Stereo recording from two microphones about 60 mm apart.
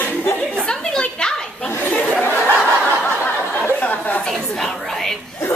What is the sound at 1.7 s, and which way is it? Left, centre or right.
Chatter, left.